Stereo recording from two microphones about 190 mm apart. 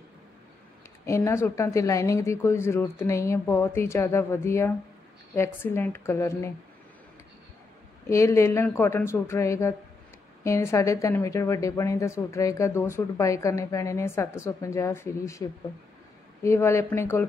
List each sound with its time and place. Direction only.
1.0 s a woman's voice: 15° left (ahead or behind)
8.1 s a woman's voice: 15° left (ahead or behind)
16.4 s a woman's voice: 15° left (ahead or behind)